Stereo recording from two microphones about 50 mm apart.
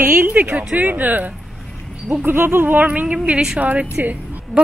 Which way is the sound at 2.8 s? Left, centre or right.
Right.